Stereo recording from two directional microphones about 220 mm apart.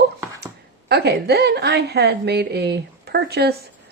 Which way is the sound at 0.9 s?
50° right (ahead or behind).